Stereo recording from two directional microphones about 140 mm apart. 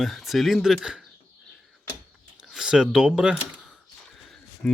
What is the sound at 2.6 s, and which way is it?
Speech, 5° right (ahead or behind).